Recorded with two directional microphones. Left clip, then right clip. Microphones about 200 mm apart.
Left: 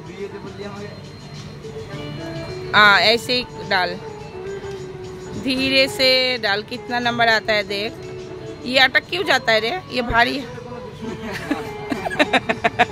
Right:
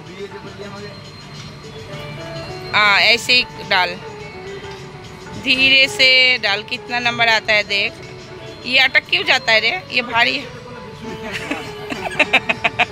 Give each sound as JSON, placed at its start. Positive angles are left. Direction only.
{"t": 2.7, "sound": "speech", "side_deg": 30}
{"t": 5.4, "sound": "a woman's voice", "side_deg": 30}
{"t": 11.3, "sound": "music", "side_deg": 30}